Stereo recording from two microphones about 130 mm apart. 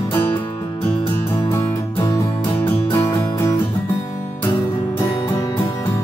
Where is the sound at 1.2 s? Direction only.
20° left (ahead or behind).